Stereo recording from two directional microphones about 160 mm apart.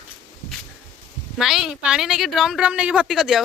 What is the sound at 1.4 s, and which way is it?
A woman's voice, centre (ahead or behind).